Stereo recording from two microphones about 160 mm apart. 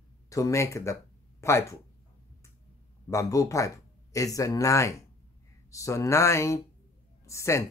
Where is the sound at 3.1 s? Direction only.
20° left (ahead or behind).